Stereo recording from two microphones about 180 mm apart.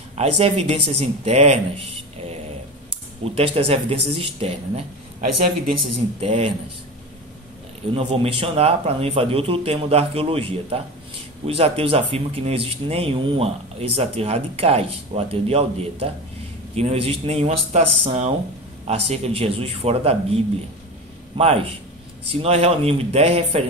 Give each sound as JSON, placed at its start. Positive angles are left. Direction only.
{"t": 0.2, "sound": "speech", "side_deg": -35}
{"t": 3.3, "sound": "speech", "side_deg": -35}
{"t": 7.9, "sound": "speech", "side_deg": -35}
{"t": 22.3, "sound": "speech", "side_deg": -35}